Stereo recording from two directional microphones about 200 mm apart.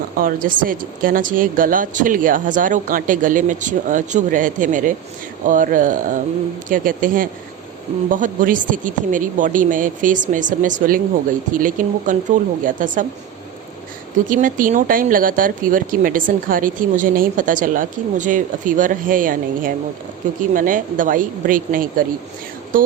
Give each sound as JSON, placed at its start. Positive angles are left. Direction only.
{"t": 0.2, "sound": "speech", "side_deg": -45}
{"t": 14.3, "sound": "speech", "side_deg": -40}